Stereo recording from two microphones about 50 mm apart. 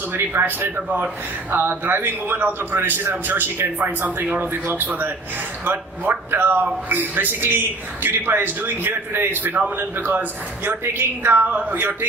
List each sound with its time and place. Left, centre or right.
0.1 s a man's voice: right
0.9 s a woman's voice: right
1.5 s a man's voice: right